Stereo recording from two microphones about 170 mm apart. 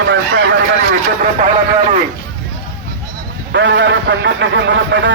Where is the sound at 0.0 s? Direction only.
85° right.